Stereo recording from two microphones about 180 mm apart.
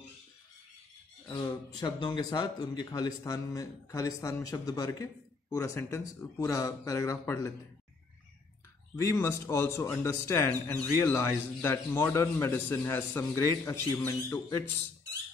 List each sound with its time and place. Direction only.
1.3 s speech: 20° left (ahead or behind)
8.9 s a man's voice: 15° left (ahead or behind)